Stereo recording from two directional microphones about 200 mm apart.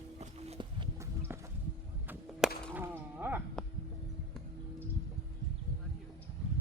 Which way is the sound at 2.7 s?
10° right (ahead or behind).